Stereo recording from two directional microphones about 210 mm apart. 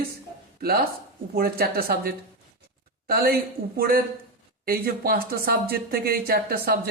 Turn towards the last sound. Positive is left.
turn(degrees=-45)  # may be behind; listen again after turning